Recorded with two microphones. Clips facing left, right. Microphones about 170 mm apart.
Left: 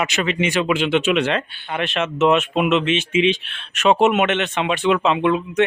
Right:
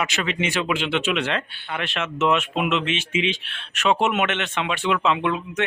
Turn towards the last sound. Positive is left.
turn(degrees=25)  # may be behind; listen again after turning